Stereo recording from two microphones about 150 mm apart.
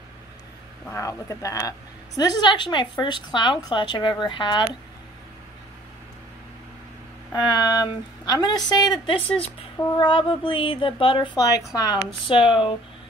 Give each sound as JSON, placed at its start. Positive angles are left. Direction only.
{"t": 0.8, "sound": "a woman's voice", "side_deg": 20}
{"t": 7.4, "sound": "a woman's voice", "side_deg": 25}
{"t": 12.3, "sound": "a woman's voice", "side_deg": 35}